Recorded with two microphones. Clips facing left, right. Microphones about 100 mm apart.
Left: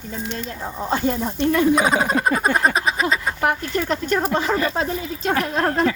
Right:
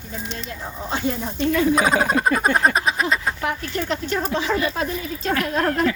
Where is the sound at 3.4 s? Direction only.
50° left (ahead or behind); by 5.9 s 30° left (ahead or behind).